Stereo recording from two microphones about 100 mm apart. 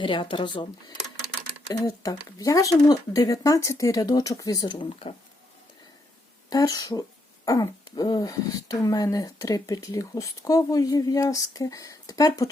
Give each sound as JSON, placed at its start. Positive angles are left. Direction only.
{"t": 0.0, "sound": "speech", "side_deg": 55}
{"t": 1.6, "sound": "speech", "side_deg": 40}
{"t": 6.5, "sound": "speech", "side_deg": 35}